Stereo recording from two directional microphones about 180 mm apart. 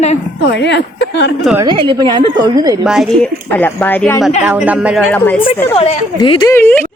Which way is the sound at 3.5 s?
10° left (ahead or behind).